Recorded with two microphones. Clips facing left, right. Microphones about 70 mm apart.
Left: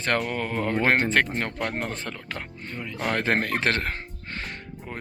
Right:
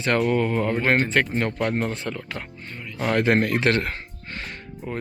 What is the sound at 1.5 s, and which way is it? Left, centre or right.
Speech, centre.